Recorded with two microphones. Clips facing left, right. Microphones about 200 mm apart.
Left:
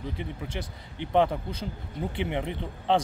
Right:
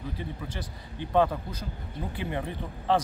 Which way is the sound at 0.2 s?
20° left (ahead or behind).